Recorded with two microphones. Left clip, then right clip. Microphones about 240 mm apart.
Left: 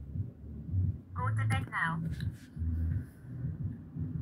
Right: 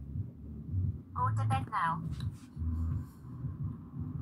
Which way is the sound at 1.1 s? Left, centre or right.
Right.